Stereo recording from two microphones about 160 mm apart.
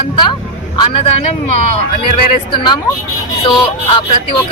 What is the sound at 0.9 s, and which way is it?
Speech, 40° left (ahead or behind).